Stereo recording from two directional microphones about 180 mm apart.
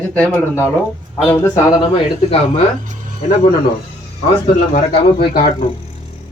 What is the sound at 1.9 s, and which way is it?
Speech, 30° left (ahead or behind).